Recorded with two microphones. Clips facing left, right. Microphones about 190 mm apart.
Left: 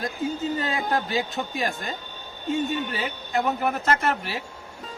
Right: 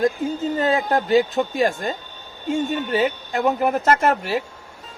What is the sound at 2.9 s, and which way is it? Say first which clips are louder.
Speech: right 6 dB; 40° right (ahead or behind).